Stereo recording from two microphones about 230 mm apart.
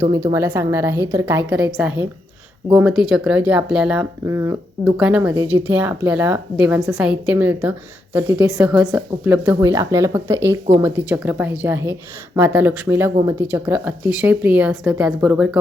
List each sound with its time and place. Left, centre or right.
0.3 s speech: centre